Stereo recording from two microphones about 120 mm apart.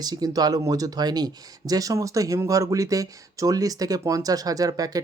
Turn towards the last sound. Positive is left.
turn(degrees=-30)  # may be behind; listen again after turning